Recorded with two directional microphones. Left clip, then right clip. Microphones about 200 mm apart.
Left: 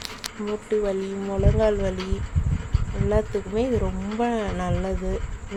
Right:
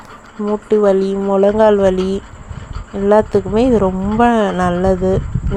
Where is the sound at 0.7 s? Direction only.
35° right (ahead or behind).